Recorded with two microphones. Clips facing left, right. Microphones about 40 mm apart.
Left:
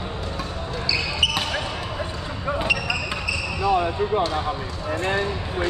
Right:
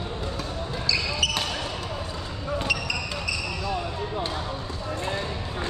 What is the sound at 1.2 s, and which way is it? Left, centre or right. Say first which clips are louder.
Basketball bounce: left 5 dB; centre.